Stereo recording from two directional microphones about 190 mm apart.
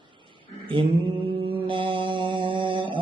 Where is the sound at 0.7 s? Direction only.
25° right (ahead or behind).